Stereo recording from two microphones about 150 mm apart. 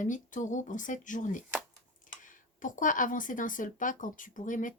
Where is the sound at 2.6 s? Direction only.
60° left (ahead or behind).